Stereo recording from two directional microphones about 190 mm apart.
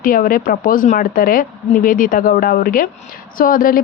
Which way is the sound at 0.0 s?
45° left (ahead or behind).